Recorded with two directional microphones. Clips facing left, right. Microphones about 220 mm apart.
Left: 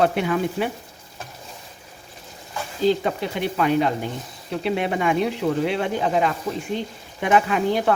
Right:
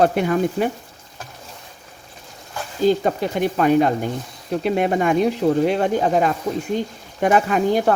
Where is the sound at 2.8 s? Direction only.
45° right (ahead or behind).